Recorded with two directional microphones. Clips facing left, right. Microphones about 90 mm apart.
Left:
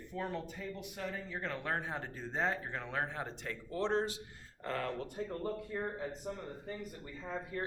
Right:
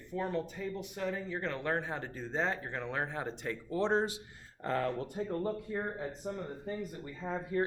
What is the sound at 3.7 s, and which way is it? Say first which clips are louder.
Speech: right 3 dB; 15° right (ahead or behind).